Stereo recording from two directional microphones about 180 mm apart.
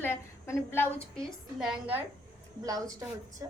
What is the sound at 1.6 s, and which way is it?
Speech, 5° right (ahead or behind).